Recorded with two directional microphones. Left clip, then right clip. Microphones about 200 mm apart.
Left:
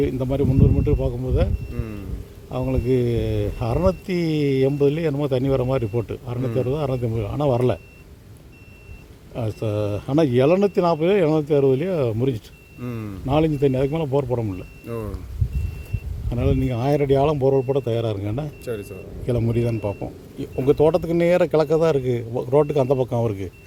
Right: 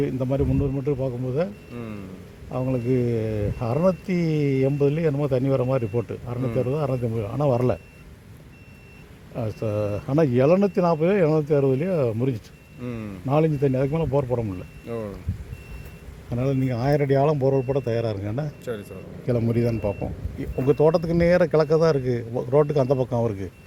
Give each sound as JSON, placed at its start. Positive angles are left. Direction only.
{"t": 0.0, "sound": "speech", "side_deg": 10}
{"t": 2.5, "sound": "speech", "side_deg": 10}
{"t": 9.3, "sound": "speech", "side_deg": 10}
{"t": 12.8, "sound": "a man's voice", "side_deg": 50}
{"t": 13.2, "sound": "speech", "side_deg": 10}
{"t": 14.8, "sound": "a man's voice", "side_deg": 50}
{"t": 16.3, "sound": "speech", "side_deg": 5}
{"t": 18.6, "sound": "speech", "side_deg": 35}
{"t": 19.2, "sound": "a man's voice", "side_deg": 0}